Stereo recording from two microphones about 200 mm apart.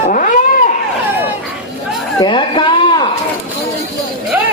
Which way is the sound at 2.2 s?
25° left (ahead or behind).